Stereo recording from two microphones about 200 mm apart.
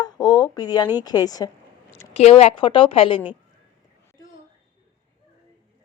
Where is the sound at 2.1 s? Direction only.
30° left (ahead or behind).